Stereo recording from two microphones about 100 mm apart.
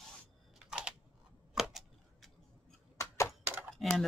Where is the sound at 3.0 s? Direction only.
30° left (ahead or behind).